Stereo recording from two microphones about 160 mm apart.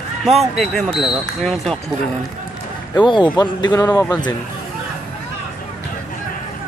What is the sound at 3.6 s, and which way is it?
Speech, 25° left (ahead or behind).